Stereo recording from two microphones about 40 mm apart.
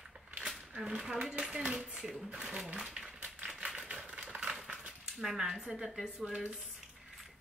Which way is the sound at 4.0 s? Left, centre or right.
Right.